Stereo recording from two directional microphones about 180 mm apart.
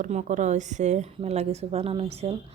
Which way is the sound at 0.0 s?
40° right (ahead or behind).